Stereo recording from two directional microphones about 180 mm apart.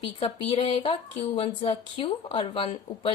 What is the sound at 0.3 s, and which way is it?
Speech, 30° left (ahead or behind).